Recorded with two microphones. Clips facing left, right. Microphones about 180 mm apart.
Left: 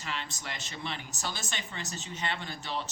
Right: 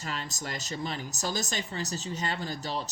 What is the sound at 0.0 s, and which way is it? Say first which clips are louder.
A woman's voice: right 2 dB; 40° right (ahead or behind).